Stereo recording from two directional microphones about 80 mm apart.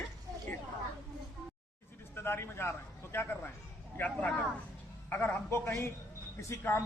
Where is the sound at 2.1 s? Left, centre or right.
Left.